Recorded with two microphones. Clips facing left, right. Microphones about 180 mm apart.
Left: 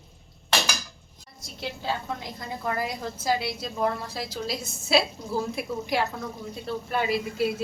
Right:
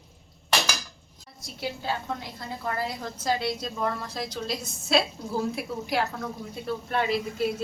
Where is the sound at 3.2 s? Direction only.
5° left (ahead or behind).